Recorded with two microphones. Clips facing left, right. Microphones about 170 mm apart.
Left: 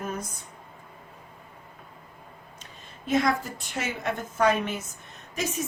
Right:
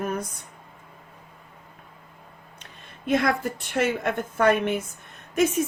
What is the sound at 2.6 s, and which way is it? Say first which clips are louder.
A woman's voice: right 6 dB; 55° right (ahead or behind).